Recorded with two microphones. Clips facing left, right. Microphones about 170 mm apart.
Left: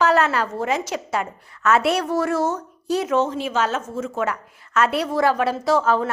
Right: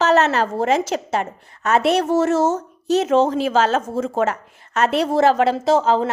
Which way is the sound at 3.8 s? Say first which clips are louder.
Right 4 dB; 30° right (ahead or behind).